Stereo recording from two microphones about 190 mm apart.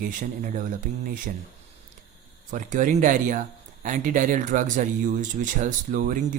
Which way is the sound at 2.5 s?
40° right (ahead or behind).